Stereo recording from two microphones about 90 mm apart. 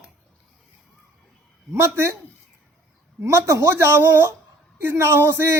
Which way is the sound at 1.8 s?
30° right (ahead or behind).